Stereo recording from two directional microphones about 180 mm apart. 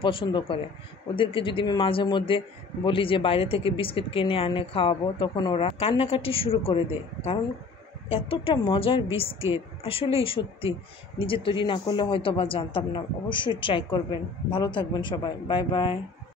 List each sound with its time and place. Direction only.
0.0 s a man's voice: 30° left (ahead or behind)
8.1 s a woman's voice: 30° left (ahead or behind)